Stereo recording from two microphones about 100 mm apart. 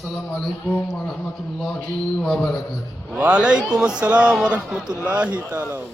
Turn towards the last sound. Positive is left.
turn(degrees=-20)  # may be behind; listen again after turning